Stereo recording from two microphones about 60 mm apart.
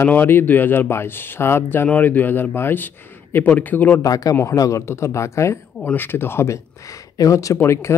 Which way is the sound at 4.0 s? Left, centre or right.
Left.